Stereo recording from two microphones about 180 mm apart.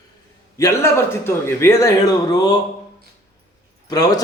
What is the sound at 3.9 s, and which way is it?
Speech, 20° left (ahead or behind).